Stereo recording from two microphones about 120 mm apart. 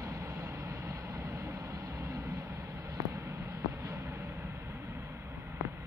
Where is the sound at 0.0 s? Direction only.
25° right (ahead or behind).